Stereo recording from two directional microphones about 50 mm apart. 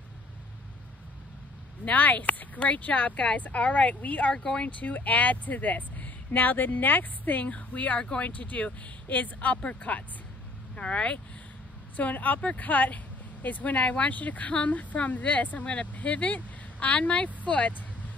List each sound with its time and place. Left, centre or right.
1.9 s speech: left